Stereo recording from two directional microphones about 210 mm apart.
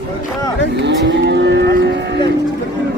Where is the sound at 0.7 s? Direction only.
55° right (ahead or behind).